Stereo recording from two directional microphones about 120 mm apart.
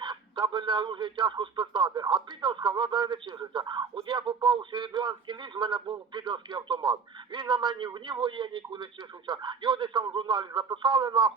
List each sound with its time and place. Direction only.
0.0 s speech: 40° right (ahead or behind)